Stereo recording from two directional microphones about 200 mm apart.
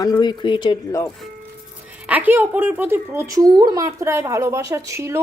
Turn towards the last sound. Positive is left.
turn(degrees=-15)  # may be behind; listen again after turning